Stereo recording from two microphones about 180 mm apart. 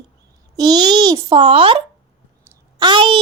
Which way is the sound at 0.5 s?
20° right (ahead or behind).